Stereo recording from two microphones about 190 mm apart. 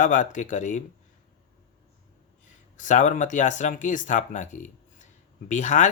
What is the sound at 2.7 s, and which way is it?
Speech, 40° left (ahead or behind).